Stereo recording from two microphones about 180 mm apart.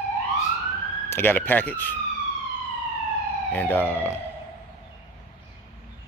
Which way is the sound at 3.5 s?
10° left (ahead or behind).